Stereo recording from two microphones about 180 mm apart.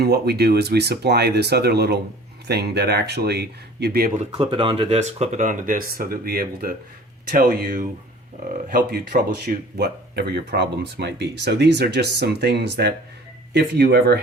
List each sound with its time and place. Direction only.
0.0 s speech: 65° right (ahead or behind)
4.4 s speech: 30° right (ahead or behind); by 14.2 s 60° right (ahead or behind)